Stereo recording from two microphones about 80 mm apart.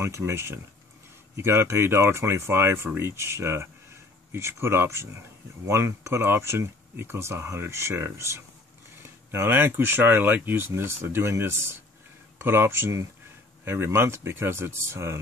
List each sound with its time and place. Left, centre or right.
0.0 s speech: right